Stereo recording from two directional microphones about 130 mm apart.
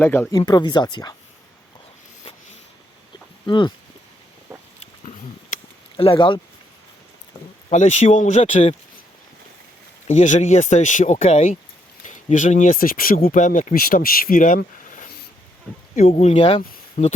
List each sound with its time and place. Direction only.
0.0 s speech: 15° left (ahead or behind)
0.3 s speech: 30° left (ahead or behind)
3.4 s speech: 40° left (ahead or behind)
6.0 s speech: 40° left (ahead or behind)
7.7 s speech: 65° left (ahead or behind)
10.1 s speech: 65° left (ahead or behind); by 15.1 s 90° left
16.0 s speech: 55° left (ahead or behind)
17.0 s speech: 90° left